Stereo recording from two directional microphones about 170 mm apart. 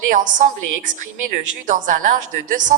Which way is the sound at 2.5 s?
50° right (ahead or behind).